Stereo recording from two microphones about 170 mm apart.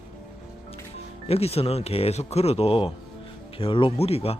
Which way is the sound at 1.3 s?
35° left (ahead or behind).